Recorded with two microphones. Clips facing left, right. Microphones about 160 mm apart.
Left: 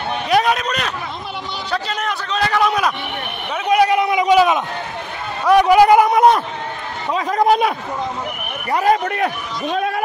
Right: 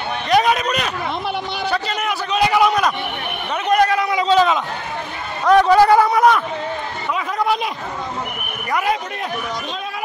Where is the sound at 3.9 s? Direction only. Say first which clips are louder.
Left 2 dB; 20° left (ahead or behind).